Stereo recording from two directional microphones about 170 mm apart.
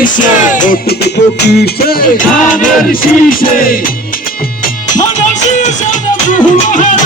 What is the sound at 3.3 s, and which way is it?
Music, 55° left (ahead or behind).